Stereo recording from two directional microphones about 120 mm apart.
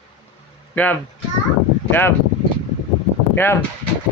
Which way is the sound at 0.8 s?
15° left (ahead or behind).